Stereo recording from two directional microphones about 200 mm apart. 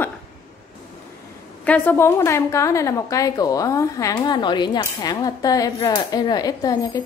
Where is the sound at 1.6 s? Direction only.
10° left (ahead or behind).